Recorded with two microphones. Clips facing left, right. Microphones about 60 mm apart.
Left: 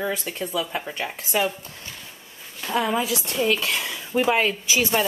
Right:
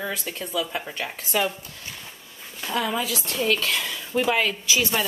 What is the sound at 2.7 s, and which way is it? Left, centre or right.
Speech, centre.